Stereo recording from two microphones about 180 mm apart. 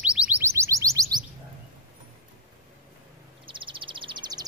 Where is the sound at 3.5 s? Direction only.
30° right (ahead or behind).